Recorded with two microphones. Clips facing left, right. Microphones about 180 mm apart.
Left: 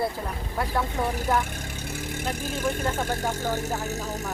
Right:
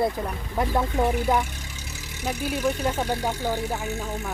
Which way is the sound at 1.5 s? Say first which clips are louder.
Left 6 dB; 55° left (ahead or behind).